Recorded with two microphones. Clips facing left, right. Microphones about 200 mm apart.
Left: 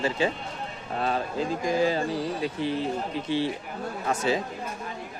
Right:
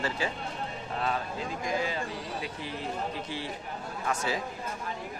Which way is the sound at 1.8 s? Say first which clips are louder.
Left 9 dB; 35° left (ahead or behind).